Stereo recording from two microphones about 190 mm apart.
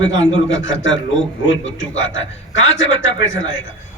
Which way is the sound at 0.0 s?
85° left.